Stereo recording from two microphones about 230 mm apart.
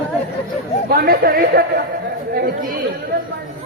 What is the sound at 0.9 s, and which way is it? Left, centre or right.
Speech, right.